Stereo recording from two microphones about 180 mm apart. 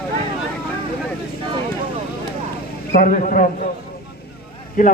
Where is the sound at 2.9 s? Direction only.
50° left (ahead or behind).